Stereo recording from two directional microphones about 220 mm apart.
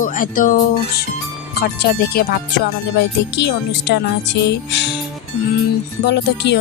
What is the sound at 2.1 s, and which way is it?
Speech, 45° left (ahead or behind).